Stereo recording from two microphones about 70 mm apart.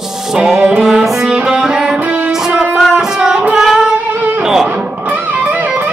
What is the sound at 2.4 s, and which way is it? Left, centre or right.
Music, centre.